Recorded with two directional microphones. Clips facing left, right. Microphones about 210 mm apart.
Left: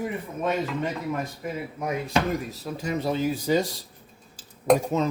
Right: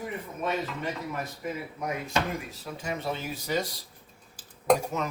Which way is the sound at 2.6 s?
40° left (ahead or behind).